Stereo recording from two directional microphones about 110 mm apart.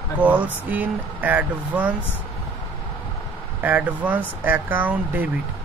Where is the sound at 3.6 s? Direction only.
15° right (ahead or behind).